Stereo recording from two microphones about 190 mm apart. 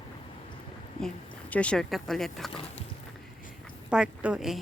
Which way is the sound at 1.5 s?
5° left (ahead or behind).